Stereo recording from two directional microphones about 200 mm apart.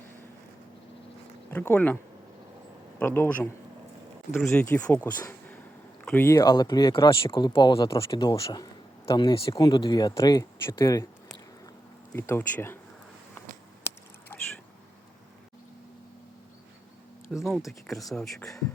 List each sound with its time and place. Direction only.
1.5 s speech: 10° left (ahead or behind)
3.0 s speech: 10° left (ahead or behind)
12.1 s speech: 15° left (ahead or behind)
14.3 s a sound: 10° left (ahead or behind)
17.3 s speech: centre (ahead or behind)